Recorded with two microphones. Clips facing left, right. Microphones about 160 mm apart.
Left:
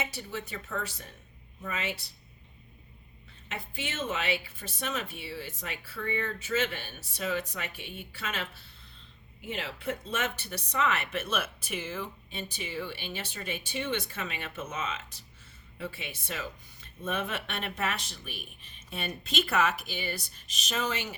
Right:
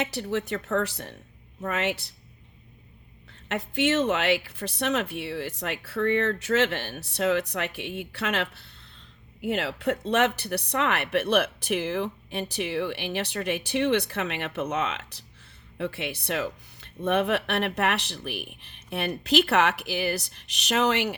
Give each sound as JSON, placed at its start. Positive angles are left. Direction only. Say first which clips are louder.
{"t": 0.0, "sound": "speech", "louder": "right 9 dB", "side_deg": -70}
{"t": 3.5, "sound": "speech", "louder": "right 14 dB", "side_deg": -75}